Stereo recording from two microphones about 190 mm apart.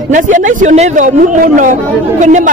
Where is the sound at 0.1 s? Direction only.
40° right (ahead or behind).